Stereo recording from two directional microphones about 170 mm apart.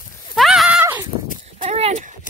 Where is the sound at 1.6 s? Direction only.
40° right (ahead or behind).